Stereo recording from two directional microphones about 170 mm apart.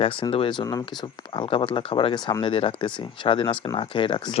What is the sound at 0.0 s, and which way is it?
Speech, 30° left (ahead or behind).